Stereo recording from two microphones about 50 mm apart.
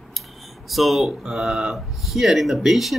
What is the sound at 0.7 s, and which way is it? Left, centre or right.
Speech, centre.